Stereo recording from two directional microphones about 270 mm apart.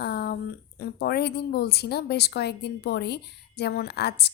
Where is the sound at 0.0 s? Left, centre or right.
Left.